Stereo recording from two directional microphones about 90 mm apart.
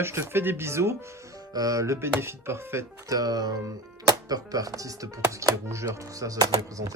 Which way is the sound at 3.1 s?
45° right (ahead or behind).